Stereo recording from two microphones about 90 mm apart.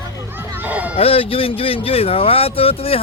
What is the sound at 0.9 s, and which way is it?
Speech, 90° left.